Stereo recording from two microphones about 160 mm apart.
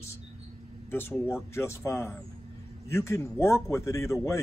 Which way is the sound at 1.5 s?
15° left (ahead or behind).